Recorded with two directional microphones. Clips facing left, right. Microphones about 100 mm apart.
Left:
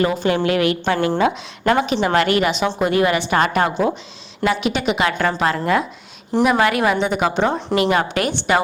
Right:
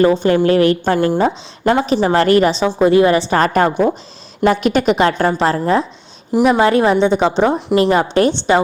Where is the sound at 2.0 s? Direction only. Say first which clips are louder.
Right 7 dB; 35° right (ahead or behind).